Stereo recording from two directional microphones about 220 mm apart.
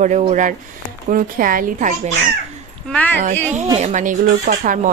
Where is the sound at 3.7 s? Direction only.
30° right (ahead or behind).